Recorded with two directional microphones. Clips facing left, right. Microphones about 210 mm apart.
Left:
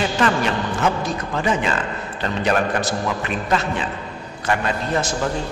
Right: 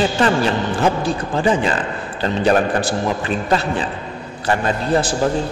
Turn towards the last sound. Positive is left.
turn(degrees=-30)  # may be behind; listen again after turning